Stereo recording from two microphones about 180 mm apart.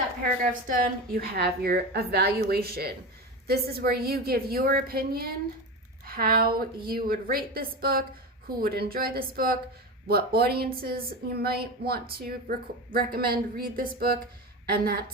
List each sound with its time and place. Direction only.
0.7 s a woman's voice: 60° right (ahead or behind)